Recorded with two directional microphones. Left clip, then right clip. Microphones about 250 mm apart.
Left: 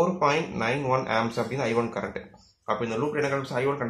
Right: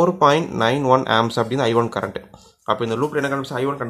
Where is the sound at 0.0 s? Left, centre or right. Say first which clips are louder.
Right 8 dB; right.